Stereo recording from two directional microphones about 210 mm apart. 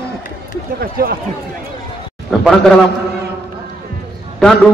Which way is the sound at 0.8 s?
45° right (ahead or behind).